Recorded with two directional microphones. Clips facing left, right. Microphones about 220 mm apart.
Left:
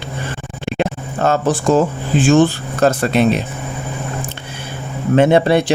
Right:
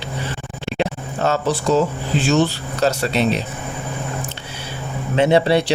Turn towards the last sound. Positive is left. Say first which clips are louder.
# left 3 dB
turn(degrees=50)  # may be behind; listen again after turning